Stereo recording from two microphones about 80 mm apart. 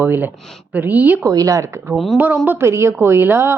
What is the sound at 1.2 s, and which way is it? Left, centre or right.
Speech, right.